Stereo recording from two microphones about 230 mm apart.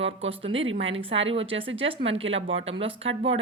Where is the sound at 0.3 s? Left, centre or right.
Right.